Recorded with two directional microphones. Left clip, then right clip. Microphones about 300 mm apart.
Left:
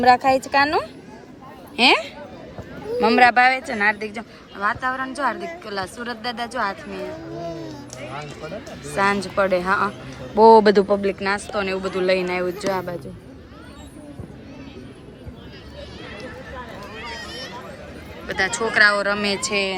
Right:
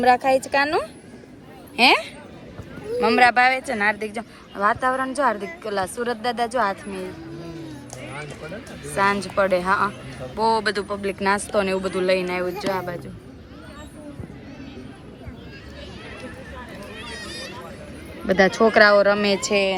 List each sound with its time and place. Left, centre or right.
0.0 s speech: centre
9.0 s speech: centre
10.3 s speech: centre
10.9 s speech: centre
18.3 s speech: centre